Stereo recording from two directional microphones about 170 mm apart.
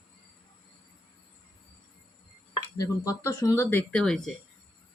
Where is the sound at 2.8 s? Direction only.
20° left (ahead or behind).